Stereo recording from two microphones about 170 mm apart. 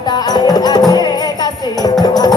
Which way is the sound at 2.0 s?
25° left (ahead or behind).